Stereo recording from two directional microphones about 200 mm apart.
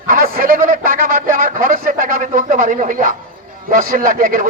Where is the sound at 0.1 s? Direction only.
45° right (ahead or behind).